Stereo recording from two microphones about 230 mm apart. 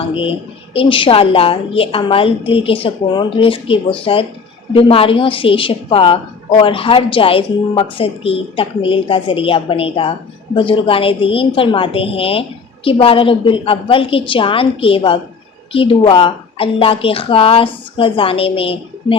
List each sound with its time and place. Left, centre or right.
0.0 s speech: left